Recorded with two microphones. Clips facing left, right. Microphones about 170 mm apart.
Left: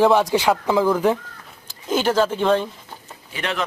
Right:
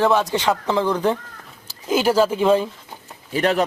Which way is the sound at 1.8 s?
10° right (ahead or behind).